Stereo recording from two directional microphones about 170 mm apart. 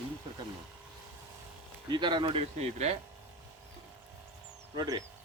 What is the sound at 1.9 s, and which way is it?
Speech, 25° right (ahead or behind).